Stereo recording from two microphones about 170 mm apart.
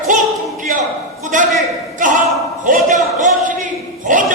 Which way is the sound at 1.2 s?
50° right (ahead or behind).